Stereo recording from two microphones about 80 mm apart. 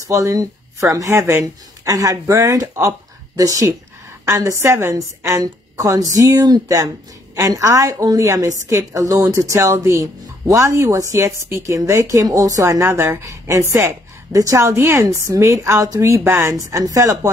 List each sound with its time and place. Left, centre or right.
0.0 s speech: right
1.4 s a woman's voice: right
12.7 s a woman's voice: right